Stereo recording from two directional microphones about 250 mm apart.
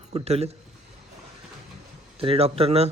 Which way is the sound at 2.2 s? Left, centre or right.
Right.